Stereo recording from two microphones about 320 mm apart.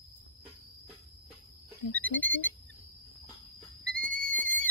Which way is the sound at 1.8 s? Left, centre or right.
Left.